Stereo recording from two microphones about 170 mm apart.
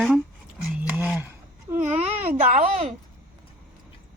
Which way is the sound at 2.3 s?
35° right (ahead or behind).